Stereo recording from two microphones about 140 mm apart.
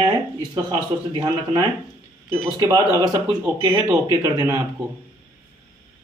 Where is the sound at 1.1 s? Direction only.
35° right (ahead or behind).